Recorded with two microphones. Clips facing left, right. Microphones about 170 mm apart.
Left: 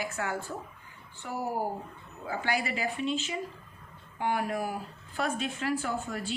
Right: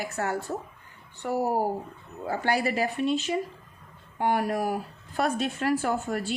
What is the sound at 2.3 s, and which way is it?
A woman's voice, 40° right (ahead or behind).